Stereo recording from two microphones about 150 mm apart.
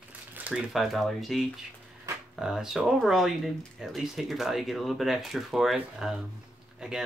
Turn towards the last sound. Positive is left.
turn(degrees=-5)  # may be behind; listen again after turning